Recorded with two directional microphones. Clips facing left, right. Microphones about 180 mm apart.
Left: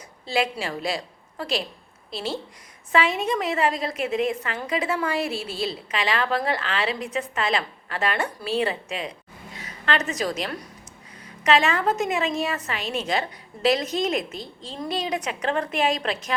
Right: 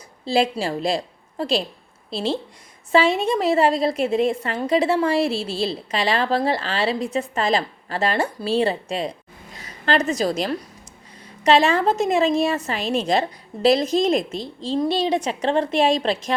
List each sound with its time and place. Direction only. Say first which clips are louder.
0.3 s a woman's voice: right 5 dB; 30° right (ahead or behind)